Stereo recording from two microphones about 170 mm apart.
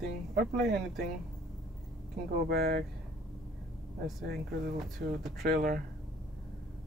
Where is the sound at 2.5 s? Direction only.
65° right (ahead or behind).